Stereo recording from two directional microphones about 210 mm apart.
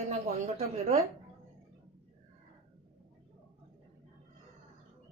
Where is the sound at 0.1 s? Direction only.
30° right (ahead or behind).